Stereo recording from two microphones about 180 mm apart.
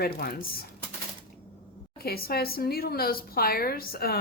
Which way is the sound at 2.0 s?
60° left (ahead or behind).